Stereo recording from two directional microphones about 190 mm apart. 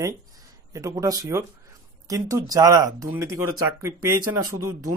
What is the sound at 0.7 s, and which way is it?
Speech, 15° right (ahead or behind).